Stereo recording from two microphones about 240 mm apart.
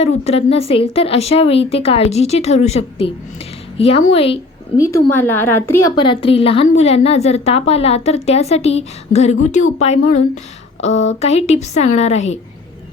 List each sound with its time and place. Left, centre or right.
0.3 s a woman's voice: left
4.8 s a woman's voice: centre; by 12.4 s left